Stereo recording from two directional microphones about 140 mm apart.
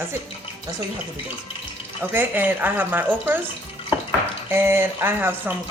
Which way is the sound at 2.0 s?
15° right (ahead or behind).